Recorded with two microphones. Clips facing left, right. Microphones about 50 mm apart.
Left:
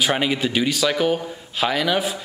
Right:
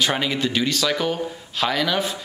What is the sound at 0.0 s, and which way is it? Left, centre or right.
Speech, centre.